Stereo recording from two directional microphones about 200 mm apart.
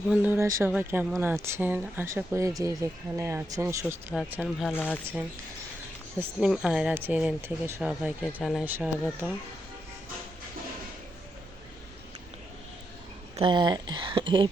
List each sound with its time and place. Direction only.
0.1 s speech: 10° right (ahead or behind)
4.1 s speech: 5° right (ahead or behind)
6.1 s speech: 5° right (ahead or behind)
13.3 s speech: 25° right (ahead or behind)